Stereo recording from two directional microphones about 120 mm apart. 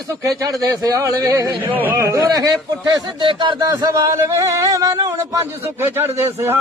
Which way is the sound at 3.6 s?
25° right (ahead or behind).